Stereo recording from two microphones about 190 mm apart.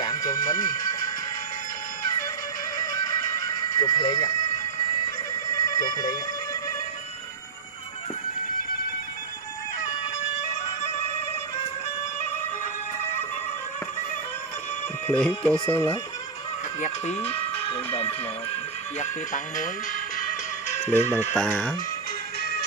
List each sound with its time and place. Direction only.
0.0 s a sound: 20° left (ahead or behind)
3.6 s speech: 20° left (ahead or behind)
5.5 s alarm: 20° left (ahead or behind)
10.4 s music: 35° left (ahead or behind)
15.0 s speech: 5° left (ahead or behind)
17.6 s speech: 30° left (ahead or behind)
18.9 s music: 45° left (ahead or behind)
20.9 s speech: 10° left (ahead or behind)